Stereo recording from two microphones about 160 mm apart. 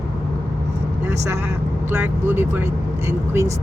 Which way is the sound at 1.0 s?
15° right (ahead or behind).